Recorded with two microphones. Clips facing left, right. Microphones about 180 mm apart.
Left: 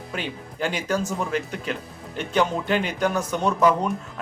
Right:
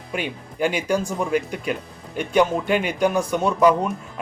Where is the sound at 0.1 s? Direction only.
15° right (ahead or behind).